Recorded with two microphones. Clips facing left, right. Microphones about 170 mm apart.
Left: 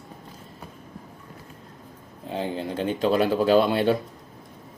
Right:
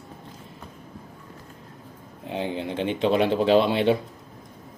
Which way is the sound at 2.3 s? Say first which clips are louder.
Even; 20° right (ahead or behind).